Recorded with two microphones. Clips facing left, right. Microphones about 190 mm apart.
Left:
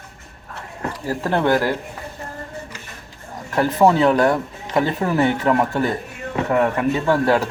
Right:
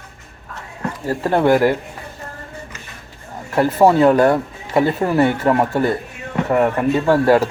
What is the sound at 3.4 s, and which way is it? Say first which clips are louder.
Speech: right 2 dB; 10° right (ahead or behind).